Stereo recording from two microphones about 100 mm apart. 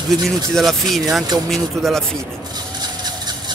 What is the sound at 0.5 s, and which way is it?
Speech, 5° left (ahead or behind).